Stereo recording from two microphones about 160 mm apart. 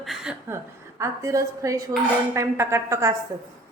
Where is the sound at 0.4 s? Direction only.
15° right (ahead or behind).